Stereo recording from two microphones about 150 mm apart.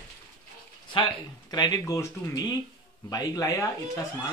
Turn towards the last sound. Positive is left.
turn(degrees=20)  # may be behind; listen again after turning